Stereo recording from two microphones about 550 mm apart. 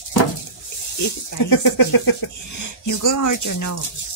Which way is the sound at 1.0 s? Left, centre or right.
Left.